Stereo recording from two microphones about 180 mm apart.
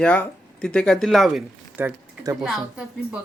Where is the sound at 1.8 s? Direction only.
15° right (ahead or behind).